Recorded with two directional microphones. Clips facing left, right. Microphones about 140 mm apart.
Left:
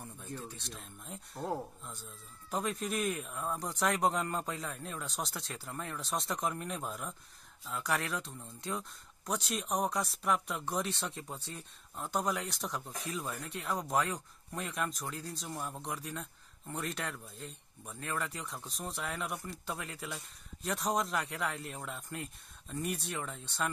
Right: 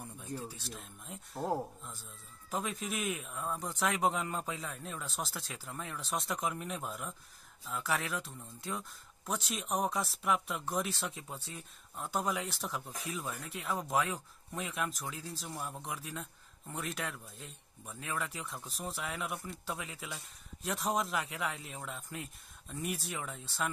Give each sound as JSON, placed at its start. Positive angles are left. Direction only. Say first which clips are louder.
{"t": 0.4, "sound": "speech", "louder": "right 2 dB", "side_deg": -5}